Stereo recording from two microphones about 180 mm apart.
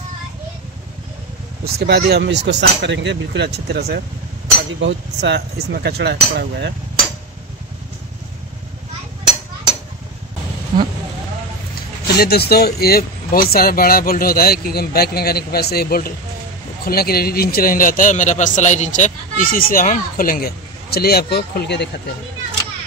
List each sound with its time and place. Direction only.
1.6 s speech: 60° right (ahead or behind)
2.4 s speech: 75° right (ahead or behind)
4.7 s speech: 80° right
12.2 s a man's voice: 60° left (ahead or behind)